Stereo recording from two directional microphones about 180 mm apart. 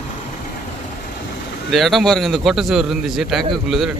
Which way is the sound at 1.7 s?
Centre (ahead or behind).